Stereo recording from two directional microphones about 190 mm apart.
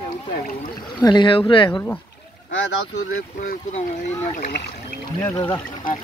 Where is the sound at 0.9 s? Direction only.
25° left (ahead or behind).